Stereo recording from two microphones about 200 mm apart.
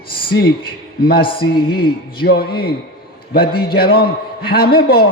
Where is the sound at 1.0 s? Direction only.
50° left (ahead or behind).